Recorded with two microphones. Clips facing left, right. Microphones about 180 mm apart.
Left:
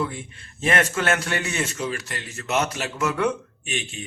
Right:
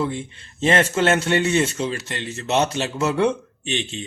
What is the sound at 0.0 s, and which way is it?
A man's voice, 25° right (ahead or behind).